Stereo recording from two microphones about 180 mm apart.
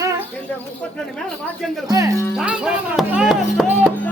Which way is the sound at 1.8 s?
20° right (ahead or behind).